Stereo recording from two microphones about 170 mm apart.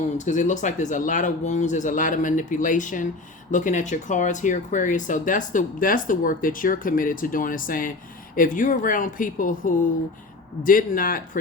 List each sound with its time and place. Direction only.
0.2 s a man's voice: 45° left (ahead or behind)